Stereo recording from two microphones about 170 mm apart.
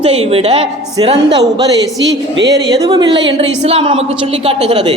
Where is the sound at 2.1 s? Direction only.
90° right.